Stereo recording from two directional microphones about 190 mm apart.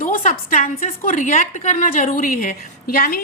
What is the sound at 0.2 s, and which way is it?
A woman's voice, 45° left (ahead or behind).